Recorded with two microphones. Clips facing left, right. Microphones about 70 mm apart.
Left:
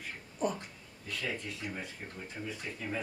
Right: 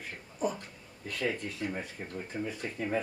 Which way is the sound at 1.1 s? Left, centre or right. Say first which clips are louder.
Right 5 dB; right.